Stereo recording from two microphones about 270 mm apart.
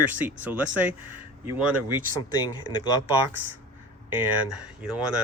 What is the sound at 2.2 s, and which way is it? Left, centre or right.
Speech, centre.